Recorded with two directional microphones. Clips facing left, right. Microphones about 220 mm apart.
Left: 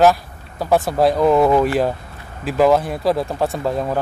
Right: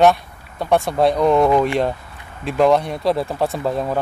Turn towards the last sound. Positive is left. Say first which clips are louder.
# even
turn(degrees=0)  # may be behind; listen again after turning